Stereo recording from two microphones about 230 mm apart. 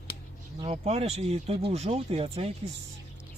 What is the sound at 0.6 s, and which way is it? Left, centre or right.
Speech, right.